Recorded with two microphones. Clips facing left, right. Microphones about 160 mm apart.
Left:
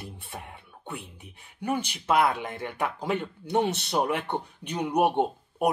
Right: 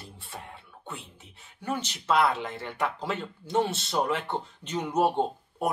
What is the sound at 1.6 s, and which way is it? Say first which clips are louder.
Speech: left 3 dB; 15° left (ahead or behind).